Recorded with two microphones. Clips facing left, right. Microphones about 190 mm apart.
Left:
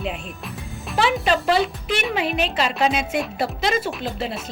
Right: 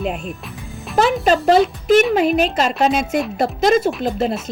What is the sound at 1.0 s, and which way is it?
Speech, 45° right (ahead or behind).